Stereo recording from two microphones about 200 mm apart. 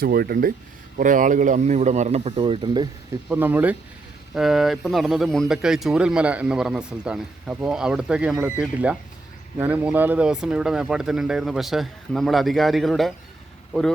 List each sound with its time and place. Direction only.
0.0 s speech: 50° right (ahead or behind); by 2.9 s 25° right (ahead or behind)
3.2 s speech: 10° right (ahead or behind)